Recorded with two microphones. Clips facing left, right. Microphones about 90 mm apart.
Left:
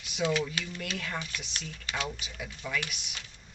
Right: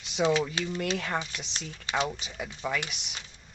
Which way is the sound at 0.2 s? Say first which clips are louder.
Right 4 dB; 25° right (ahead or behind).